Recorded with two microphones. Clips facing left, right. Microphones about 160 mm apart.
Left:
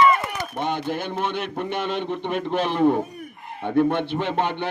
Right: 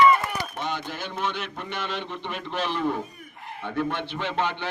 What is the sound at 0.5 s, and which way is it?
A man's voice, 55° left (ahead or behind).